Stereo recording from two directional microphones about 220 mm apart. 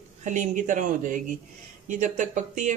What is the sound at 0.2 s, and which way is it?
Speech, 35° right (ahead or behind).